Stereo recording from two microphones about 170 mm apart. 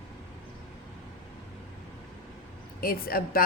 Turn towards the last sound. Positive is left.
turn(degrees=60)  # may be behind; listen again after turning